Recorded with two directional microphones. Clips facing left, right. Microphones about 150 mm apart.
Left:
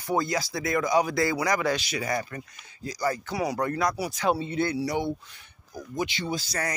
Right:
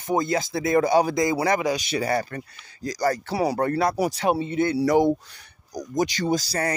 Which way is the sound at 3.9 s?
45° right (ahead or behind).